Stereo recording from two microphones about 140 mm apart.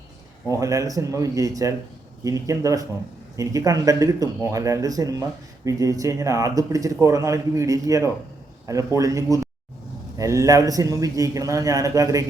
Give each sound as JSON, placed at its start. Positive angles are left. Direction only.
{"t": 0.4, "sound": "speech", "side_deg": -25}